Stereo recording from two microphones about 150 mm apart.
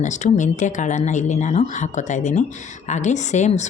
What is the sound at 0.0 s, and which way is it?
Speech, 55° left (ahead or behind).